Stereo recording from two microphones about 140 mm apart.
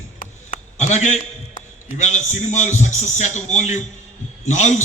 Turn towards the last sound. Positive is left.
turn(degrees=55)  # may be behind; listen again after turning